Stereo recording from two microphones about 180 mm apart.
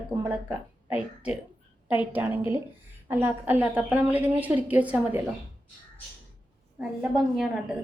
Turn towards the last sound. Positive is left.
turn(degrees=-5)  # may be behind; listen again after turning